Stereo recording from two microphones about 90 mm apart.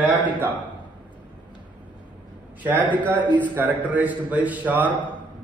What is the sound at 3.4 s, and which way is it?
A man's voice, 20° right (ahead or behind).